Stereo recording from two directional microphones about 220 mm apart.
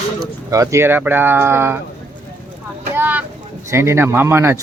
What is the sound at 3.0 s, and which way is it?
Speech, 5° right (ahead or behind).